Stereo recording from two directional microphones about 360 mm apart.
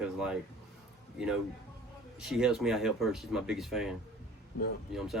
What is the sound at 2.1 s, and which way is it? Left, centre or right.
Speech, centre.